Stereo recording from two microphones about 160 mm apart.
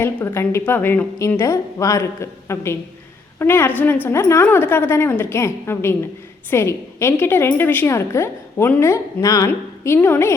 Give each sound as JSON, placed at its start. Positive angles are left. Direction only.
{"t": 0.0, "sound": "a woman's voice", "side_deg": 15}